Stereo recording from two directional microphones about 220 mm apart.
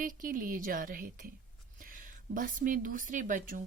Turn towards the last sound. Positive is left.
turn(degrees=-40)  # may be behind; listen again after turning